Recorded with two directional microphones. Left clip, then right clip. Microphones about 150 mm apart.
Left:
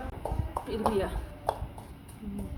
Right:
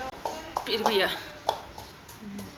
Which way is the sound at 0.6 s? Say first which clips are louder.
Right 5 dB; centre (ahead or behind).